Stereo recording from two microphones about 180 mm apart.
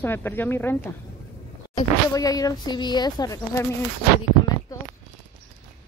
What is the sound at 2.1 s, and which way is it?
Speech, 20° left (ahead or behind).